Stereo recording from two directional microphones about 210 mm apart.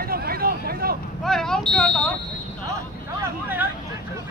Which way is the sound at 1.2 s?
Centre (ahead or behind).